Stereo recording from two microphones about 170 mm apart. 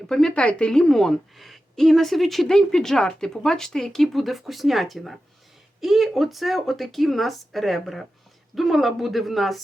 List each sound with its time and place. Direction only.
0.1 s a woman's voice: 5° left (ahead or behind)